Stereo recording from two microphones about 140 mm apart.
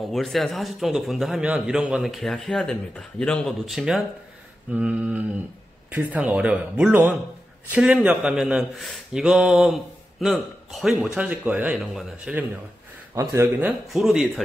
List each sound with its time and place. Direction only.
0.0 s a man's voice: centre (ahead or behind)
13.1 s speech: 20° right (ahead or behind)
13.9 s a man's voice: centre (ahead or behind)